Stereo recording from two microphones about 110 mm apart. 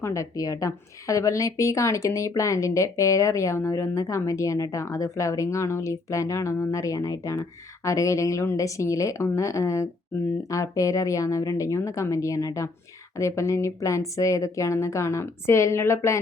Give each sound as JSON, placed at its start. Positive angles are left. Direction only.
{"t": 0.0, "sound": "a woman's voice", "side_deg": 30}